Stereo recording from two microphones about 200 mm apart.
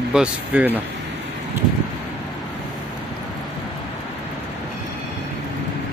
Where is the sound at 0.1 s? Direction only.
5° right (ahead or behind).